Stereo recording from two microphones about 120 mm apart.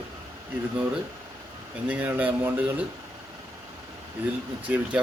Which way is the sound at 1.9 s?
15° right (ahead or behind).